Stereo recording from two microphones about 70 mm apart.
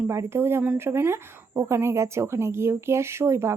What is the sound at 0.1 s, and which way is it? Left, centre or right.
A woman's voice, right.